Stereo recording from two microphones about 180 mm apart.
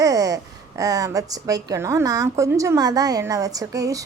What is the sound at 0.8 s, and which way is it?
A woman's voice, 20° right (ahead or behind).